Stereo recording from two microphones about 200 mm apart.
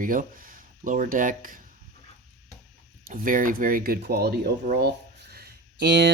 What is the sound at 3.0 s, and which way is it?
Speech, 45° right (ahead or behind).